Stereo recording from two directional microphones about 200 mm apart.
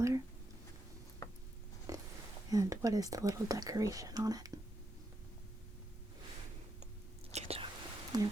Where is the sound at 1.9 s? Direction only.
15° right (ahead or behind).